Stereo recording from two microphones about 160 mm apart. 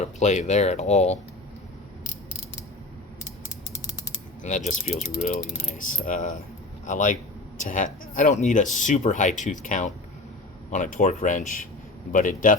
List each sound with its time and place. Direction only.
0.0 s speech: 45° left (ahead or behind)
4.4 s speech: 50° left (ahead or behind)
5.7 s mechanisms: 55° left (ahead or behind)
6.8 s speech: 55° left (ahead or behind)
12.1 s mechanisms: 55° left (ahead or behind)